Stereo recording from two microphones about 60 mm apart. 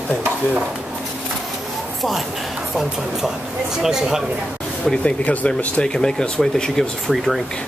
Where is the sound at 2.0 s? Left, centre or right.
Centre.